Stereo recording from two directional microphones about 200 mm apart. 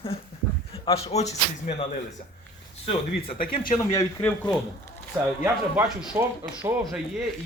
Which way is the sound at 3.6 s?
15° left (ahead or behind).